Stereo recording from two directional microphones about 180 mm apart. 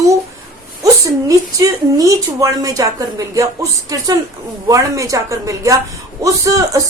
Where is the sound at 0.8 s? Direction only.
20° right (ahead or behind).